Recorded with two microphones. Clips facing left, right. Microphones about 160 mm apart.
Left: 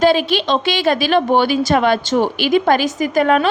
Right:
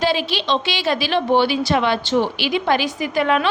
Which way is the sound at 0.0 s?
50° left (ahead or behind).